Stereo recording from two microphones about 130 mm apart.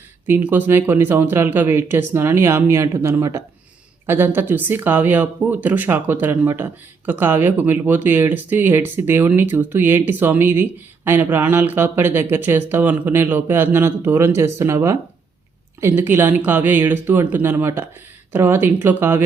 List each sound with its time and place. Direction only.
0.3 s speech: 15° right (ahead or behind)